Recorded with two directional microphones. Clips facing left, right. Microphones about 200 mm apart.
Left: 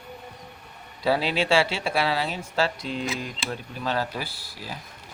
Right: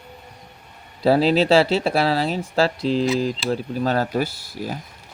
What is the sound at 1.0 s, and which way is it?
Speech, 40° right (ahead or behind).